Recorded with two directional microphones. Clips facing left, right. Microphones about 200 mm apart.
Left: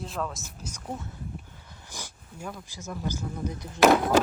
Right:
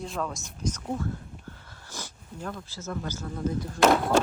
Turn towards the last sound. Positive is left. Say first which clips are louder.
# left 1 dB
turn(degrees=0)  # may be behind; listen again after turning